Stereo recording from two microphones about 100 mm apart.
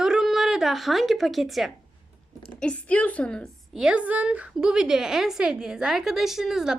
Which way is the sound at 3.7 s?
10° right (ahead or behind).